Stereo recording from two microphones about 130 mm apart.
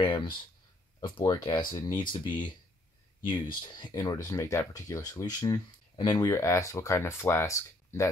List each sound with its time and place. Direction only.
0.0 s a sound: 40° left (ahead or behind)
1.0 s speech: 35° left (ahead or behind)
6.3 s speech: 20° left (ahead or behind)